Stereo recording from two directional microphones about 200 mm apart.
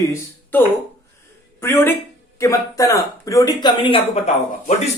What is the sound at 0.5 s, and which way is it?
Speech, 10° left (ahead or behind).